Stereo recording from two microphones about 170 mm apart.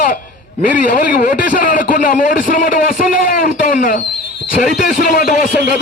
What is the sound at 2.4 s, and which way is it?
A man's voice, 55° left (ahead or behind).